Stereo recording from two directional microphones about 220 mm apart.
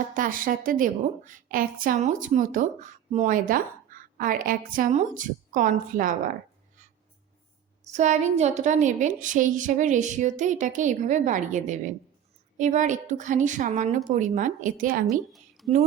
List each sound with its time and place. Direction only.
0.1 s a woman's voice: 40° right (ahead or behind)
7.9 s a woman's voice: 35° right (ahead or behind)
15.3 s a sound: centre (ahead or behind)